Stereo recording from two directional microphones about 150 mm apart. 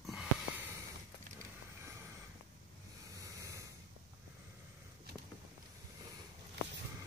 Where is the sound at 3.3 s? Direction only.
20° right (ahead or behind).